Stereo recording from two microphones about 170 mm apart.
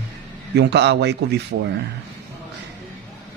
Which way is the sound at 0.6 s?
90° right.